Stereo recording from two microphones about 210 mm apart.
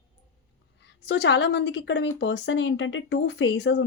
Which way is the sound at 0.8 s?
55° left (ahead or behind).